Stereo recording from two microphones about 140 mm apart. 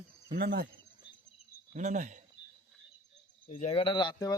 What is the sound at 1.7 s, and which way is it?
Speech, 60° right (ahead or behind).